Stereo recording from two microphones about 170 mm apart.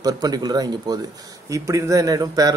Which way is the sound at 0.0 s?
25° right (ahead or behind).